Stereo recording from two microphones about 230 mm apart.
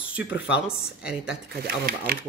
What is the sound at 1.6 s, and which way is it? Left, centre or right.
Speech, right.